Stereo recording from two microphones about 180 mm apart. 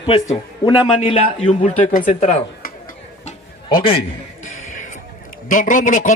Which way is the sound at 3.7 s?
30° left (ahead or behind).